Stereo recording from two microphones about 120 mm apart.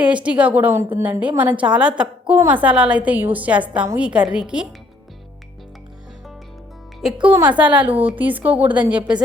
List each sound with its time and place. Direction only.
0.0 s a woman's voice: 10° right (ahead or behind)
7.0 s a woman's voice: 10° right (ahead or behind)